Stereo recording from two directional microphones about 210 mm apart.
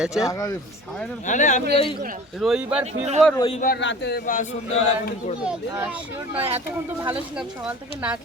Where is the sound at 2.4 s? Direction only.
Centre (ahead or behind).